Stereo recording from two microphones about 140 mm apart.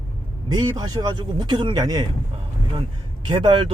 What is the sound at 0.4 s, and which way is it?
Speech, 30° right (ahead or behind).